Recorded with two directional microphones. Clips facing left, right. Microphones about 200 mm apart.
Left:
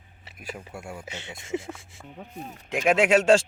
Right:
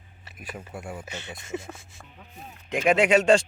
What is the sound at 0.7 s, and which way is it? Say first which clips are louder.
Speech: right 1 dB; 5° right (ahead or behind).